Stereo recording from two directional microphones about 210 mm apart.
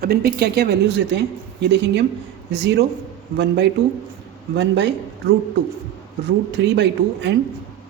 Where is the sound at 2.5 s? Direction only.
55° right (ahead or behind).